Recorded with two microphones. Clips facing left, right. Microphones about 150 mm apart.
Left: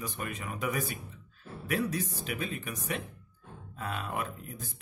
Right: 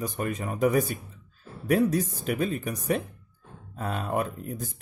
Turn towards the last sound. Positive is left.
turn(degrees=-45)  # may be behind; listen again after turning